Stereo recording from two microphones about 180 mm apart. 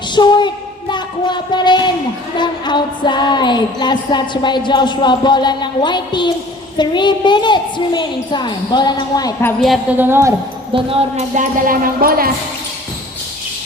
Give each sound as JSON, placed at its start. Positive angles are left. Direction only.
{"t": 0.2, "sound": "a sound", "side_deg": 25}
{"t": 2.3, "sound": "music", "side_deg": 25}
{"t": 9.6, "sound": "a woman's voice", "side_deg": 0}
{"t": 10.0, "sound": "a woman's voice", "side_deg": -15}
{"t": 10.8, "sound": "speech", "side_deg": -30}
{"t": 11.3, "sound": "music", "side_deg": -50}